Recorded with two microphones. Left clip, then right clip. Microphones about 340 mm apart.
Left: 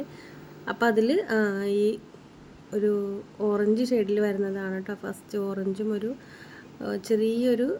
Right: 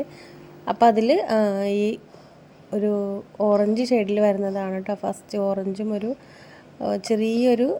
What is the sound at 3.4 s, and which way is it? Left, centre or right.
A woman's voice, centre.